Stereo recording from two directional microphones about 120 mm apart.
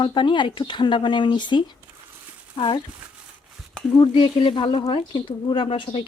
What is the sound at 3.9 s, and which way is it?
Speech, 50° left (ahead or behind).